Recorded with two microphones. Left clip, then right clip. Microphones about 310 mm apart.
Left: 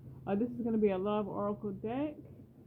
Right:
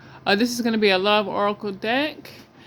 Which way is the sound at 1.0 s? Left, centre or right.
Right.